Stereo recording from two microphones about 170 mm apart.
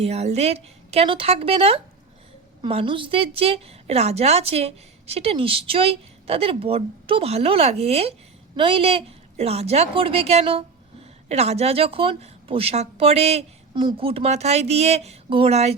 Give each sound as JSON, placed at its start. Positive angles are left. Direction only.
{"t": 0.0, "sound": "a woman's voice", "side_deg": -40}